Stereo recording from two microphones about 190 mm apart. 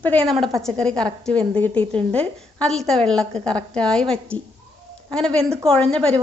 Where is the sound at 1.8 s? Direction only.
30° right (ahead or behind).